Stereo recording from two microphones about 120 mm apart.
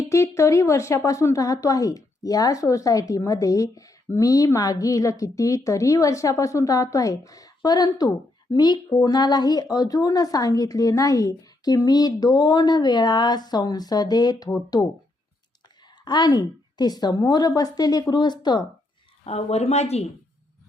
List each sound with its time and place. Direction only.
0.1 s a woman's voice: 25° left (ahead or behind)
16.0 s speech: 35° left (ahead or behind)
19.2 s speech: 60° left (ahead or behind)